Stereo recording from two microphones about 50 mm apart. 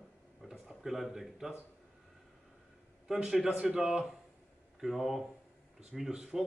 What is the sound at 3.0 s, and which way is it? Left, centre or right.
A man's voice, centre.